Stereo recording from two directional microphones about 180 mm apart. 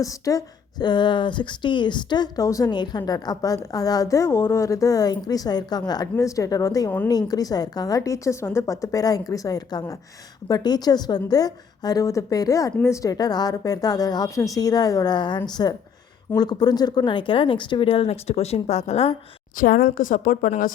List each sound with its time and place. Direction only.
0.0 s speech: 20° left (ahead or behind); by 19.1 s 35° left (ahead or behind)
19.5 s a woman's voice: 55° left (ahead or behind)